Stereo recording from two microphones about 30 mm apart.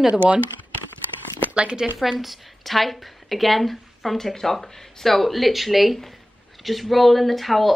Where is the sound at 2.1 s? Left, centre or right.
Centre.